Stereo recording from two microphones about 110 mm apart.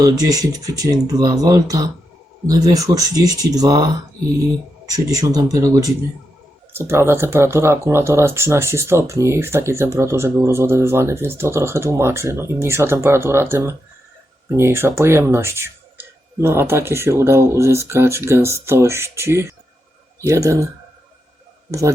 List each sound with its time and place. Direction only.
0.0 s speech: 35° right (ahead or behind)
4.9 s speech: 30° right (ahead or behind)
21.7 s speech: 30° right (ahead or behind)